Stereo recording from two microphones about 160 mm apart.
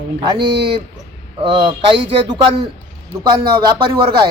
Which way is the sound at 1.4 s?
30° right (ahead or behind).